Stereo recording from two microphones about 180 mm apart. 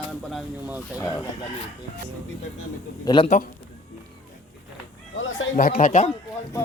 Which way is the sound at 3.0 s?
25° left (ahead or behind).